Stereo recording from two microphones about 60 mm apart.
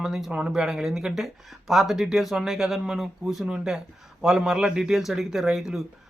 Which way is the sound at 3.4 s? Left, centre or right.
Centre.